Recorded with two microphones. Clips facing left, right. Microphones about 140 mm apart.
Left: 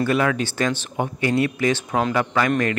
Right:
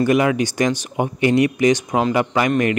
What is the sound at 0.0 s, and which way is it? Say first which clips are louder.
A man's voice: right 4 dB; 15° right (ahead or behind).